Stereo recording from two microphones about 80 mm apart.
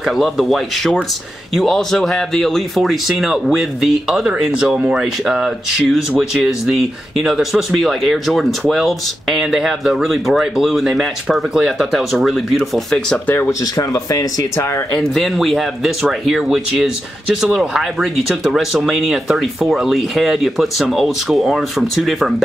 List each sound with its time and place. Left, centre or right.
0.0 s speech: centre
4.3 s speech: centre
13.5 s speech: left
15.1 s speech: centre